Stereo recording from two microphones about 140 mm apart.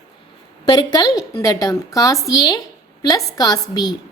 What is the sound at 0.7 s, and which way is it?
A woman's voice, 30° left (ahead or behind).